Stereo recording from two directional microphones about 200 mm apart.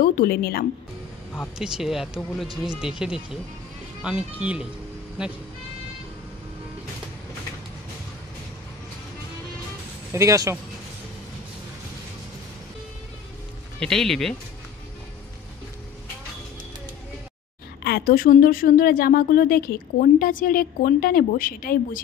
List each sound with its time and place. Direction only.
0.0 s speech: 50° left (ahead or behind)
1.6 s speech: centre (ahead or behind)
10.1 s speech: 15° right (ahead or behind)
13.7 s speech: centre (ahead or behind)
17.8 s speech: 50° left (ahead or behind)